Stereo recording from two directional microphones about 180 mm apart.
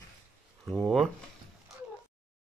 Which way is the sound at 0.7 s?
Centre (ahead or behind).